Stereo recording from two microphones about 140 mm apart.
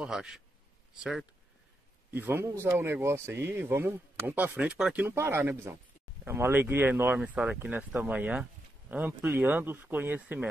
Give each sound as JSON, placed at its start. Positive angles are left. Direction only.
{"t": 0.0, "sound": "a man's voice", "side_deg": -5}
{"t": 2.0, "sound": "speech", "side_deg": -15}